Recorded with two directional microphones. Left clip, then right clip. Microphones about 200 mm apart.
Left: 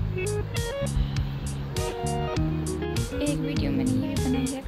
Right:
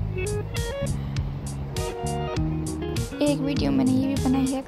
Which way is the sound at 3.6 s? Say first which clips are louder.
Right 4 dB; 30° right (ahead or behind).